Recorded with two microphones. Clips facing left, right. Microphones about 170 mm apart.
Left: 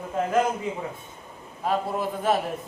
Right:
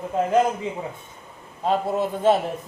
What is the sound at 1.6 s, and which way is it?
Speech, 25° right (ahead or behind).